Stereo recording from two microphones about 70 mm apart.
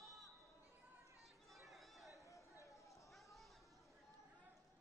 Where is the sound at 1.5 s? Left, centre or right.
Centre.